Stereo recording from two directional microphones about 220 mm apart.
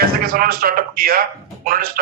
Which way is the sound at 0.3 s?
45° right (ahead or behind).